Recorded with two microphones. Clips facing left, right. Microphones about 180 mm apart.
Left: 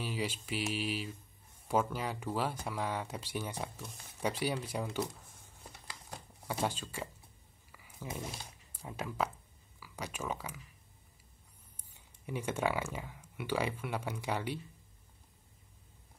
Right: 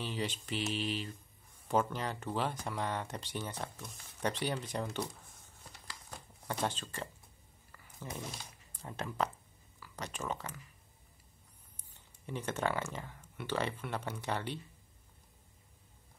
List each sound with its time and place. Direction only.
0.0 s speech: 10° left (ahead or behind)
5.9 s a sound: 10° left (ahead or behind)
8.8 s speech: 5° left (ahead or behind)
11.7 s speech: 10° left (ahead or behind)